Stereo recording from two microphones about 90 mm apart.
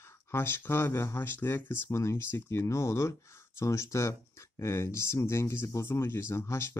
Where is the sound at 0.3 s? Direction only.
25° left (ahead or behind).